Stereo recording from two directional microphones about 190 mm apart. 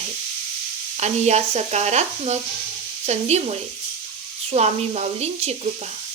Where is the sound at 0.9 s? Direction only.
35° right (ahead or behind).